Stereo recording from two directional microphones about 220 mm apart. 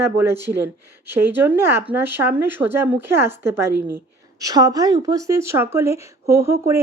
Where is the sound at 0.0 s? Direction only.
10° right (ahead or behind).